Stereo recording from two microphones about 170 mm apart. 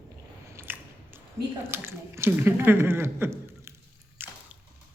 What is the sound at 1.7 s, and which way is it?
A woman's voice, 15° right (ahead or behind).